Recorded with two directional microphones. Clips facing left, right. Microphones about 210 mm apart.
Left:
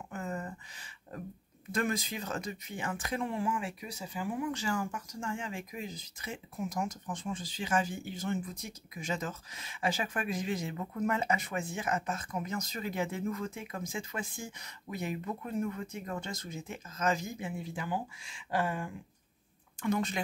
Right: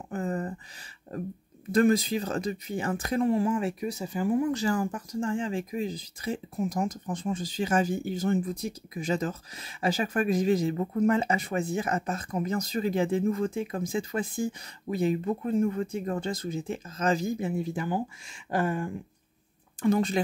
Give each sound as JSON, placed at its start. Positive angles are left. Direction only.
{"t": 0.1, "sound": "a sound", "side_deg": -35}
{"t": 1.7, "sound": "speech", "side_deg": -35}
{"t": 19.8, "sound": "speech", "side_deg": -35}